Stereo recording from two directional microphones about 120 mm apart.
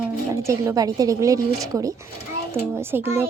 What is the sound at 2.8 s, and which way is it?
Speech, 20° right (ahead or behind).